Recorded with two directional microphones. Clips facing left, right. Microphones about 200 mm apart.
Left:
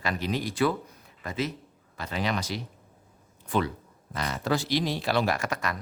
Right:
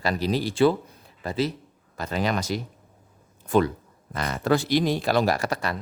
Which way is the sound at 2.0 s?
45° right (ahead or behind).